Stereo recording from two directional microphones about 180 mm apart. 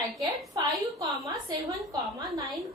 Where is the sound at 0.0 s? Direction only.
20° right (ahead or behind).